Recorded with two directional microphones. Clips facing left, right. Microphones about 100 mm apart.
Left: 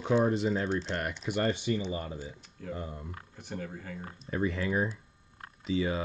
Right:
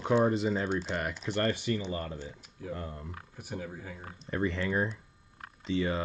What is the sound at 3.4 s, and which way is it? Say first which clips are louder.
Speech: even; 10° right (ahead or behind).